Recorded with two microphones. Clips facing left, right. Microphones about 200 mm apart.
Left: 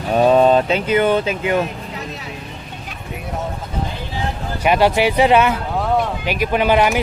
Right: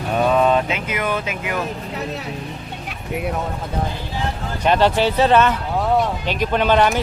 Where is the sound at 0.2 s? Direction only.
30° left (ahead or behind).